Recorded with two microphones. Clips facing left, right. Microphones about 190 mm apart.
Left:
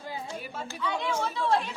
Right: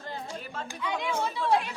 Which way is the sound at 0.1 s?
10° left (ahead or behind).